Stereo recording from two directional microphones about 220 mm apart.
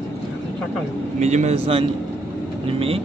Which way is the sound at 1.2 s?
30° right (ahead or behind).